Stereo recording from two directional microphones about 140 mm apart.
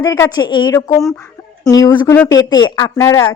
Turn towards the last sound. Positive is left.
turn(degrees=20)  # may be behind; listen again after turning